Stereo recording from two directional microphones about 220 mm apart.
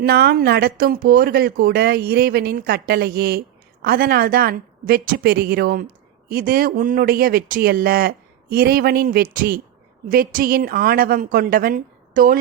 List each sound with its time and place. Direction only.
0.0 s a woman's voice: 45° right (ahead or behind)